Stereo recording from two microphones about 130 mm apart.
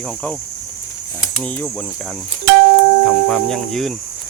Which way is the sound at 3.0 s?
5° left (ahead or behind).